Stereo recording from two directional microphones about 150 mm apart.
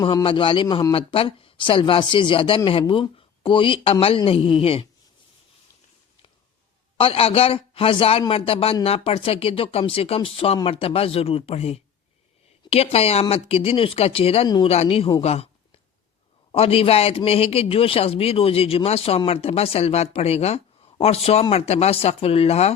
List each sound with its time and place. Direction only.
0.0 s a man's voice: 30° left (ahead or behind)
7.0 s a man's voice: 40° left (ahead or behind)
14.4 s speech: 30° left (ahead or behind)
14.7 s a man's voice: 40° left (ahead or behind)
16.5 s a man's voice: 40° left (ahead or behind)